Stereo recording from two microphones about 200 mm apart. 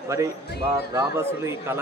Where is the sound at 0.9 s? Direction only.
15° right (ahead or behind).